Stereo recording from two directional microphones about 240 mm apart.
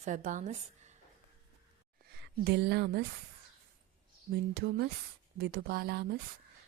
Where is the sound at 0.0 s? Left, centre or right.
Right.